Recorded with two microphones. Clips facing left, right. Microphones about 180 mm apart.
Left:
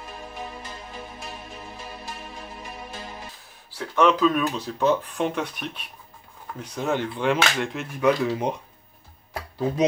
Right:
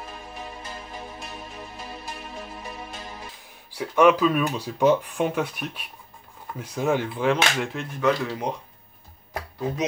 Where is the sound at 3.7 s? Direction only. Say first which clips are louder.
Right 3 dB; 10° right (ahead or behind).